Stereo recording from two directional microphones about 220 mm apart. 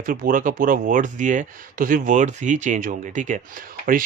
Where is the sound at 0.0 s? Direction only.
40° right (ahead or behind).